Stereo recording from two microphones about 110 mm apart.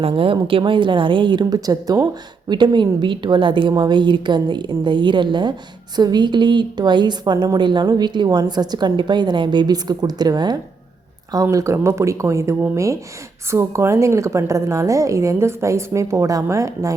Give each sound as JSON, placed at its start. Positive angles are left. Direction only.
{"t": 0.0, "sound": "a woman's voice", "side_deg": -55}
{"t": 11.5, "sound": "a woman's voice", "side_deg": -25}